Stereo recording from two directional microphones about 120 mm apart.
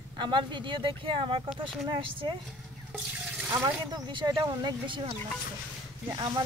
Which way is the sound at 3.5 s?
35° right (ahead or behind).